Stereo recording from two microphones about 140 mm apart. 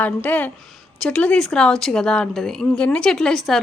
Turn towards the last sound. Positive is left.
turn(degrees=5)  # may be behind; listen again after turning